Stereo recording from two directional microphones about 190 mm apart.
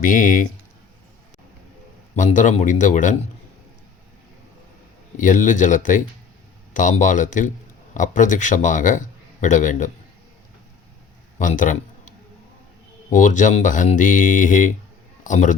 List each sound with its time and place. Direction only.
0.0 s speech: 45° left (ahead or behind)
2.1 s a man's voice: 40° left (ahead or behind)
5.1 s a man's voice: 40° left (ahead or behind)
11.3 s a man's voice: 45° left (ahead or behind)